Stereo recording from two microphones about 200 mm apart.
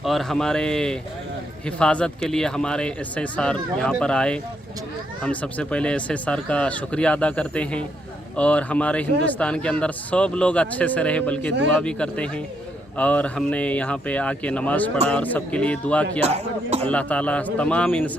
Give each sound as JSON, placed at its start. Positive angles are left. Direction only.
{"t": 0.0, "sound": "speech", "side_deg": 0}
{"t": 16.2, "sound": "speech", "side_deg": -30}
{"t": 16.8, "sound": "speech", "side_deg": 5}